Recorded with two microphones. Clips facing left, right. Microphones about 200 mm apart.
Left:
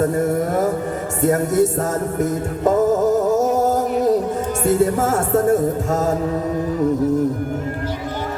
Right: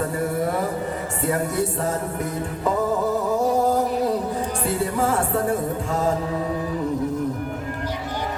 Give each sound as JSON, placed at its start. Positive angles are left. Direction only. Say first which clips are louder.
{"t": 0.0, "sound": "music", "louder": "left 5 dB", "side_deg": 45}